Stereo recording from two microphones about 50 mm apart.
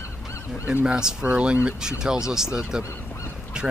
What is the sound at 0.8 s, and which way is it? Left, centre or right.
Speech, centre.